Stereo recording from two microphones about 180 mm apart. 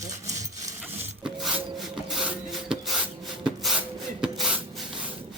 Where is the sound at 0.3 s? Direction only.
20° right (ahead or behind).